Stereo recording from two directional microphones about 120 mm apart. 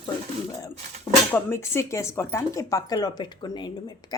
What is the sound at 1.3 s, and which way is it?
Speech, 20° left (ahead or behind).